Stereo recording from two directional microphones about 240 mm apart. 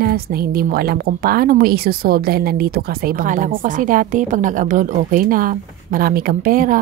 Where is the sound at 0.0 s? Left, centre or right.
Right.